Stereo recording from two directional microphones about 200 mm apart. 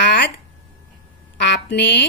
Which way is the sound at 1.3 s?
60° left (ahead or behind).